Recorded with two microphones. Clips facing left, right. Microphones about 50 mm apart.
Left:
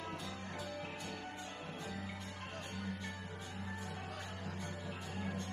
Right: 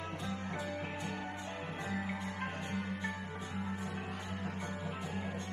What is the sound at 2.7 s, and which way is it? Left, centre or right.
Music, right.